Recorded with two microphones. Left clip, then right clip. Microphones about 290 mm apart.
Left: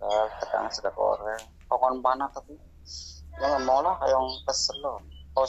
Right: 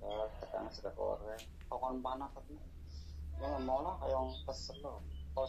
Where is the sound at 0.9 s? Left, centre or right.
Left.